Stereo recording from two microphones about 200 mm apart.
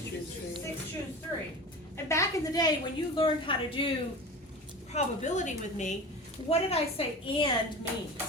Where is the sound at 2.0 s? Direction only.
15° left (ahead or behind).